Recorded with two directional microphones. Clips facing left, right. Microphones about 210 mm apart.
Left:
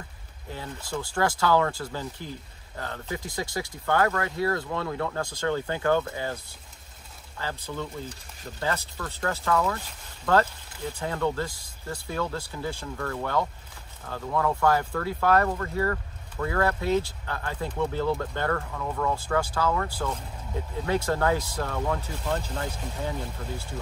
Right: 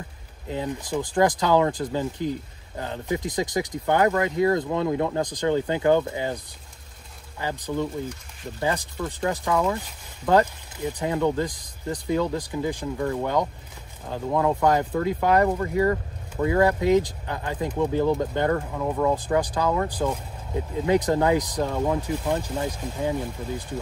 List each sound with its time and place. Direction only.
0.5 s speech: 20° right (ahead or behind)